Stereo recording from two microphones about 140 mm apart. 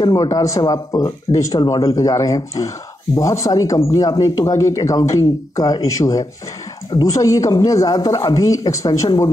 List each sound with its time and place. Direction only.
0.0 s speech: 25° left (ahead or behind)